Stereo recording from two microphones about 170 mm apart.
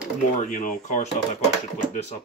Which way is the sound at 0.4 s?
45° left (ahead or behind).